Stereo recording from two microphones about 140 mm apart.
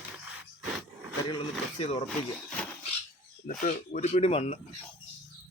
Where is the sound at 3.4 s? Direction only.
65° left (ahead or behind); by 4.6 s 45° left (ahead or behind).